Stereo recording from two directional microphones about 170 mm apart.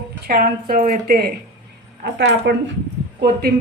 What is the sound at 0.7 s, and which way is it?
Speech, 55° right (ahead or behind).